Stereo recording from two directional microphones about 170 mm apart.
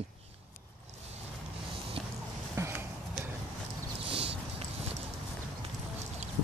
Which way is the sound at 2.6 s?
15° right (ahead or behind).